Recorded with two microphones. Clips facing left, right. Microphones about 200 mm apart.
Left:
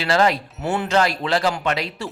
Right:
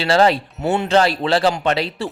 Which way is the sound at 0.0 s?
30° right (ahead or behind).